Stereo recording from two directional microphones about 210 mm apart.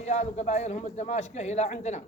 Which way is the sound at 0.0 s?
30° left (ahead or behind).